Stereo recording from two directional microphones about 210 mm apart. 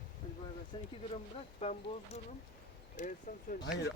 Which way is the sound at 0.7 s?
25° left (ahead or behind).